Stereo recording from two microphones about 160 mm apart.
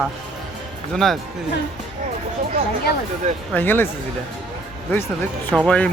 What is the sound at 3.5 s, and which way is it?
Speech, 10° left (ahead or behind).